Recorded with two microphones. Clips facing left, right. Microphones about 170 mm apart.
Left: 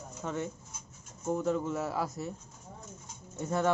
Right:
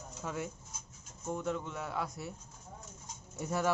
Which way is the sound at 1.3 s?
Centre (ahead or behind).